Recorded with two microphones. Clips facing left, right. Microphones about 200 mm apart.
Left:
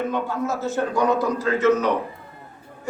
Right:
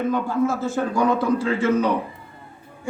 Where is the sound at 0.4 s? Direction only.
30° right (ahead or behind).